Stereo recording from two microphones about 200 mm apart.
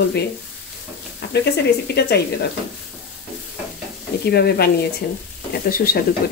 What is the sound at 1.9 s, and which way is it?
Speech, 55° left (ahead or behind).